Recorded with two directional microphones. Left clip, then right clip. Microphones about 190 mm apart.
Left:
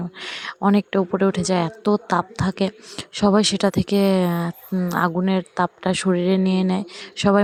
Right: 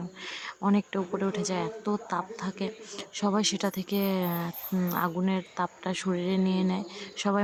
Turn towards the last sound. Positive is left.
turn(degrees=35)  # may be behind; listen again after turning